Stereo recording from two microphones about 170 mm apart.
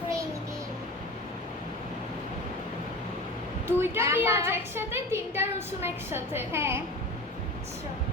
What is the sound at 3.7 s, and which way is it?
A woman's voice, 15° right (ahead or behind).